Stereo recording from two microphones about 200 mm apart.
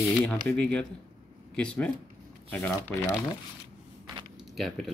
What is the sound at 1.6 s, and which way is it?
Speech, 5° left (ahead or behind).